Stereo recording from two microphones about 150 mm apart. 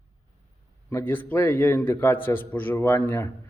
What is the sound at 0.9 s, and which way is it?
Speech, 15° left (ahead or behind).